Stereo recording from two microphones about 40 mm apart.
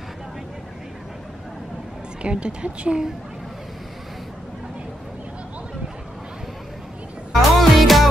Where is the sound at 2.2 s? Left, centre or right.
Right.